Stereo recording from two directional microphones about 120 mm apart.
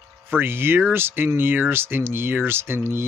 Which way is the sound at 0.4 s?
20° right (ahead or behind).